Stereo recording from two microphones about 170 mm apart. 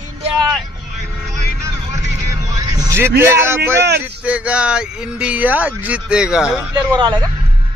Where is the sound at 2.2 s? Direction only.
20° right (ahead or behind).